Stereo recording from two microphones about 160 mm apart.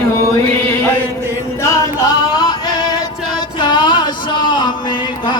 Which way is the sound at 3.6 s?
30° left (ahead or behind).